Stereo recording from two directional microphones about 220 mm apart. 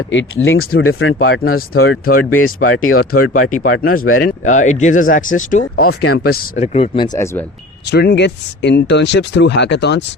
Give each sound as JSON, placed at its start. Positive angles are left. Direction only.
{"t": 0.1, "sound": "speech", "side_deg": 55}
{"t": 1.3, "sound": "speech", "side_deg": 40}
{"t": 2.3, "sound": "speech", "side_deg": 70}
{"t": 3.1, "sound": "speech", "side_deg": 45}
{"t": 6.0, "sound": "speech", "side_deg": 90}
{"t": 6.6, "sound": "speech", "side_deg": 30}
{"t": 7.9, "sound": "speech", "side_deg": 50}